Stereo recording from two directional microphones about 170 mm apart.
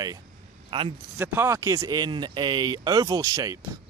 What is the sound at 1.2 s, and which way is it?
Speech, 15° right (ahead or behind).